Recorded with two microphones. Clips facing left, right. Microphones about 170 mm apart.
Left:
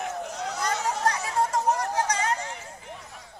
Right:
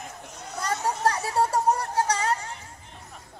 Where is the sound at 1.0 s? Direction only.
35° right (ahead or behind).